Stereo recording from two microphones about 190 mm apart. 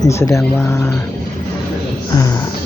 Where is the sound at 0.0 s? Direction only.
15° left (ahead or behind).